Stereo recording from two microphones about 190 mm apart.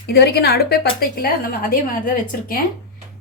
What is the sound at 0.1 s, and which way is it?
A woman's voice, 55° left (ahead or behind).